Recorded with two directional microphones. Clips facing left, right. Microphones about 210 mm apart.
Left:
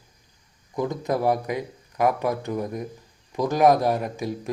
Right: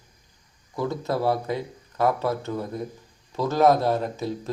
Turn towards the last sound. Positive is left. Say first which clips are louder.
# even
turn(degrees=15)  # may be behind; listen again after turning